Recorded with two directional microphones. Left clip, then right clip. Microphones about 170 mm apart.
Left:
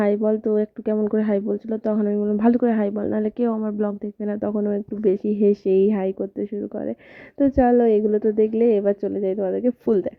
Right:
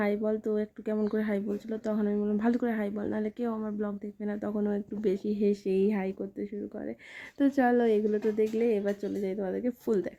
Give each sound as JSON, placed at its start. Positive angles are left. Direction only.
{"t": 0.0, "sound": "speech", "side_deg": 45}
{"t": 7.3, "sound": "a woman's voice", "side_deg": 35}